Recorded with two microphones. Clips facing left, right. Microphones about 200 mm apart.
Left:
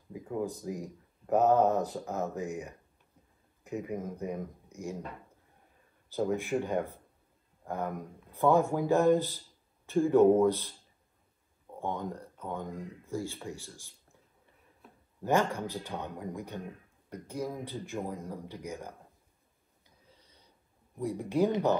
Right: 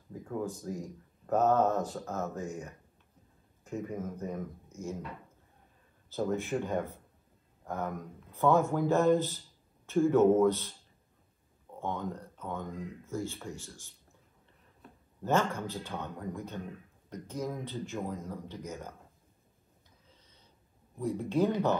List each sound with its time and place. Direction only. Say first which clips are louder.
0.1 s speech: left 2 dB; 15° left (ahead or behind)
6.0 s speech: left 1 dB; 15° left (ahead or behind)
11.8 s speech: left 1 dB; 15° left (ahead or behind)
14.8 s a sound: right 2 dB; 5° left (ahead or behind)
15.2 s speech: left 1 dB; 15° left (ahead or behind)
21.0 s speech: left 1 dB; 15° left (ahead or behind)